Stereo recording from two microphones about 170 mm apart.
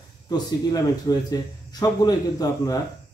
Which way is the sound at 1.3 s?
20° left (ahead or behind).